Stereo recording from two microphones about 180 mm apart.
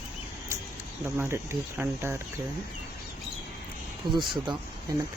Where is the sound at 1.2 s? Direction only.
15° right (ahead or behind).